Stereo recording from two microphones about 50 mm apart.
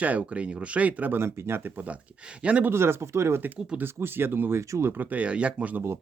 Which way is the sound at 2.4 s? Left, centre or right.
Right.